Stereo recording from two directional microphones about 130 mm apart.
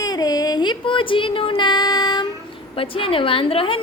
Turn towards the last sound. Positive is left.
turn(degrees=45)  # may be behind; listen again after turning